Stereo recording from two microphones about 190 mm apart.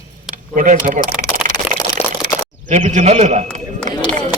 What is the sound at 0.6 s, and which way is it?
Speech, 45° right (ahead or behind).